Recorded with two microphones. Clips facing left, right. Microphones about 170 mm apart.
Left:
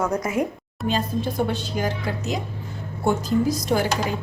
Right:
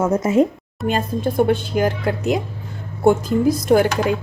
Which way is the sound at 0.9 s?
50° right (ahead or behind).